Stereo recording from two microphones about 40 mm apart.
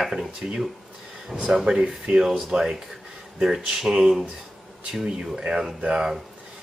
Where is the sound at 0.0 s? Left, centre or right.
Centre.